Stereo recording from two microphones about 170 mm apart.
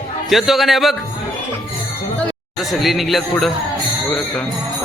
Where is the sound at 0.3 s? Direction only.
Centre (ahead or behind).